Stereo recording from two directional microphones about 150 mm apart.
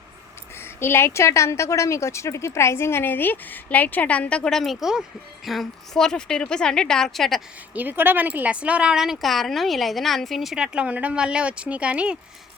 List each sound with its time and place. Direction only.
0.6 s a woman's voice: 15° left (ahead or behind)
7.7 s speech: 10° right (ahead or behind)